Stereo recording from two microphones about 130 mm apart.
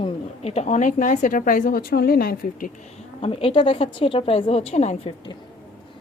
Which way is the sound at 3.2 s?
45° left (ahead or behind).